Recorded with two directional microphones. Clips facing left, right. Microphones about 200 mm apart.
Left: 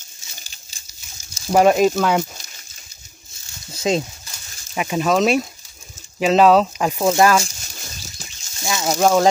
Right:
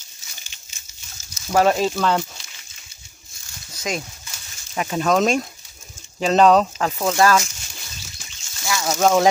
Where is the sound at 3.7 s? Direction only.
25° left (ahead or behind).